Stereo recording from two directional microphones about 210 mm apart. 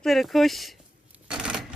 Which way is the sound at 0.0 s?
Centre (ahead or behind).